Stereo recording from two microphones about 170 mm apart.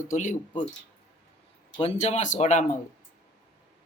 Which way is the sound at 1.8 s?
40° left (ahead or behind).